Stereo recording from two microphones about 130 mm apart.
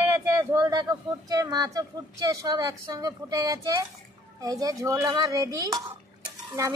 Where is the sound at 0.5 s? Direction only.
30° right (ahead or behind).